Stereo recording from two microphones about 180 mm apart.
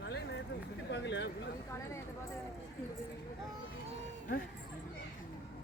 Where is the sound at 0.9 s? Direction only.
80° left.